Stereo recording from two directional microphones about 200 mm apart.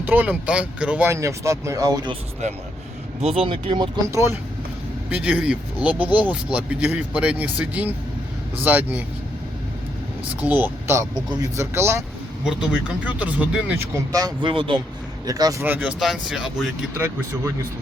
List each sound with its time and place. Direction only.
0.0 s speech: 10° right (ahead or behind)
2.4 s speech: 35° right (ahead or behind); by 9.0 s 10° right (ahead or behind)
10.4 s speech: 10° right (ahead or behind)
13.1 s speech: 10° right (ahead or behind)